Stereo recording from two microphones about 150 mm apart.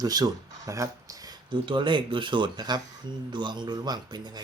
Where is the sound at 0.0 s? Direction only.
25° right (ahead or behind).